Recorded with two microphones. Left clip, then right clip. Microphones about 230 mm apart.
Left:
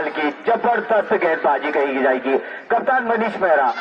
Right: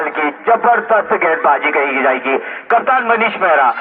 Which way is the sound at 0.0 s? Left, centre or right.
Centre.